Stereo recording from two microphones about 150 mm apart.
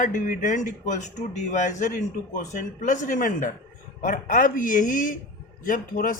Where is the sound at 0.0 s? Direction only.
55° left (ahead or behind).